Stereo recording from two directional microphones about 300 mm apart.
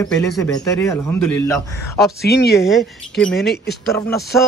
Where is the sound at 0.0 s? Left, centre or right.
Centre.